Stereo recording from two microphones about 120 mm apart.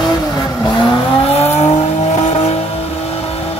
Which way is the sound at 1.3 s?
65° left (ahead or behind).